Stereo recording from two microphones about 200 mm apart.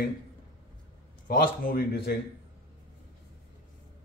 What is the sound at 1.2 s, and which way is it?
Speech, 45° left (ahead or behind).